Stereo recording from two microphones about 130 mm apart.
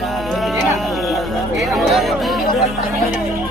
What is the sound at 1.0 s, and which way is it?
Chatter, centre (ahead or behind).